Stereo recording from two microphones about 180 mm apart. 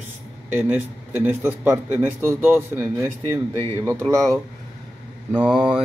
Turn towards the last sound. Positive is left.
turn(degrees=-5)  # may be behind; listen again after turning